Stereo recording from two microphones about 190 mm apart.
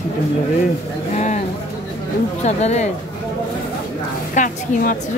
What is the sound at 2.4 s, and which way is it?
Speech, 35° left (ahead or behind).